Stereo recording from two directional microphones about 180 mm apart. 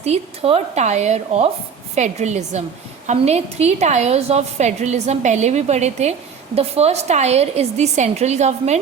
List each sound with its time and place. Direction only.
0.0 s a woman's voice: 35° right (ahead or behind)